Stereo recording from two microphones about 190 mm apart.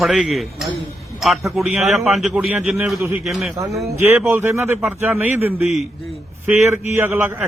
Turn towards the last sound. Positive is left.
turn(degrees=-10)  # may be behind; listen again after turning